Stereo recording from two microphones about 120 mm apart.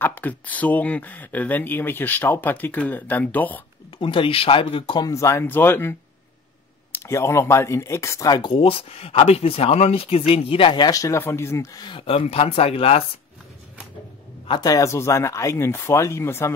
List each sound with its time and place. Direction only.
0.0 s speech: 15° left (ahead or behind)
4.0 s speech: 45° left (ahead or behind)
5.0 s speech: 25° left (ahead or behind); by 10.9 s 45° left (ahead or behind)
10.9 s speech: 25° left (ahead or behind)
12.0 s speech: 60° left (ahead or behind)
14.5 s speech: 30° left (ahead or behind)